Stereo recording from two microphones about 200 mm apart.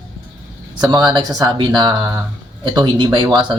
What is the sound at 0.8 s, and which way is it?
Speech, 20° right (ahead or behind).